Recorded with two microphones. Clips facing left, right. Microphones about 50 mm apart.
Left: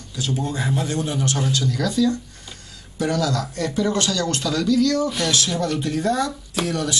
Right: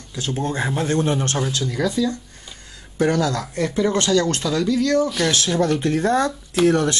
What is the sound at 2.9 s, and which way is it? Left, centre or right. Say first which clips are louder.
Speech: right 3 dB; right.